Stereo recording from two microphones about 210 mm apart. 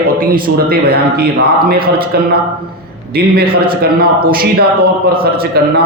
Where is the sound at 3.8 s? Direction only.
45° right (ahead or behind).